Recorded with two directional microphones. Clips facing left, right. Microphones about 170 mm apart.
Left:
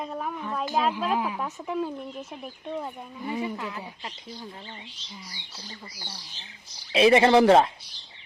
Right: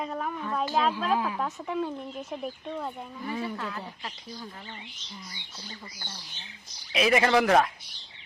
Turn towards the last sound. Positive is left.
turn(degrees=30)  # may be behind; listen again after turning